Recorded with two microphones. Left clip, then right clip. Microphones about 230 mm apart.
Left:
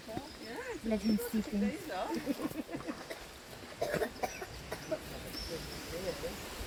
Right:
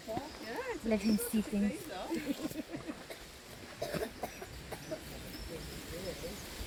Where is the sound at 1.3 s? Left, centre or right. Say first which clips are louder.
Right 1 dB; right.